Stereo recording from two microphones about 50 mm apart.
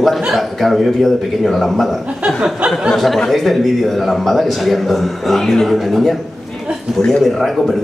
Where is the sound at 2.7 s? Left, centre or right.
Centre.